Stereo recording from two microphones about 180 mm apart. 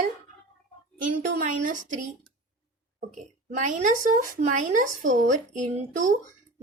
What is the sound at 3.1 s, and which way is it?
A woman's voice, 45° right (ahead or behind).